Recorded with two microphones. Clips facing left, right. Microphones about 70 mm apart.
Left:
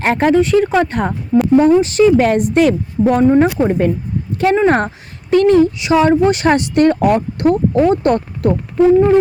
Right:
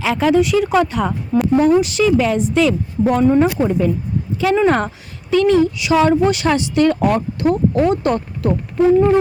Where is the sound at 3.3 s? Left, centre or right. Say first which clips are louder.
Left 2 dB; left.